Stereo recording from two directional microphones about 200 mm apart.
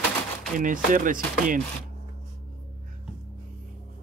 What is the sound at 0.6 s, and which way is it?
Speech, 40° right (ahead or behind).